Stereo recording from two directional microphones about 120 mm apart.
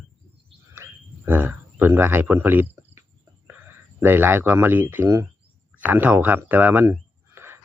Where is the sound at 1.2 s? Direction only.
15° right (ahead or behind).